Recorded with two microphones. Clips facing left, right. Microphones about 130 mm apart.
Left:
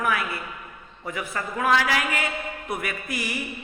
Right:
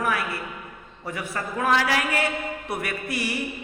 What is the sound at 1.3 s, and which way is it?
A man's voice, 30° right (ahead or behind).